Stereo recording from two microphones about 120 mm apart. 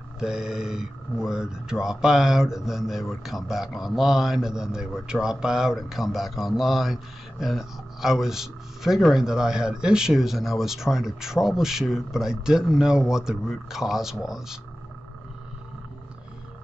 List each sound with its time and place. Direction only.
0.2 s speech: 5° right (ahead or behind)